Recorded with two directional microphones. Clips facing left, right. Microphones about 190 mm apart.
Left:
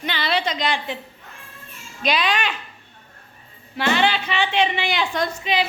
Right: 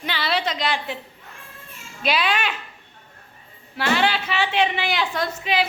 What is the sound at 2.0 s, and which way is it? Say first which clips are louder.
Speech: left 1 dB; 5° right (ahead or behind).